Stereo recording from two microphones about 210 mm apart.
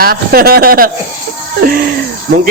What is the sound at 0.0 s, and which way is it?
Speech, 45° right (ahead or behind).